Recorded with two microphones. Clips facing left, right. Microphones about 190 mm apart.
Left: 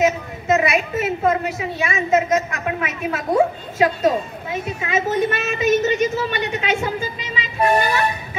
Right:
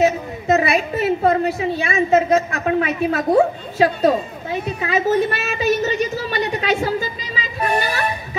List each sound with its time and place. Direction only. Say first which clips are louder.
0.0 s a woman's voice: right 2 dB; 35° right (ahead or behind)